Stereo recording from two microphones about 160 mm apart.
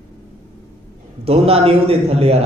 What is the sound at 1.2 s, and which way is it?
A man's voice, 40° right (ahead or behind).